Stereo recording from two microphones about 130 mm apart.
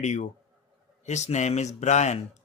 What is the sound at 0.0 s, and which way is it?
Speech, 65° left (ahead or behind).